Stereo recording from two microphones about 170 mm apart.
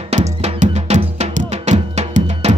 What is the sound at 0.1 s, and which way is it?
Cowbell, 40° right (ahead or behind).